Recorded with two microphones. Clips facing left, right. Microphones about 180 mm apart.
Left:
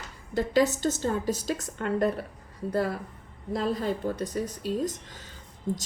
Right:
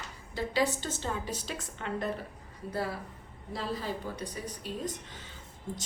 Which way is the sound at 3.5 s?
50° left (ahead or behind).